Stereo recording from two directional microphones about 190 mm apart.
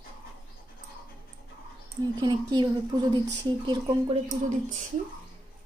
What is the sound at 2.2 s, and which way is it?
A woman's voice, 20° right (ahead or behind).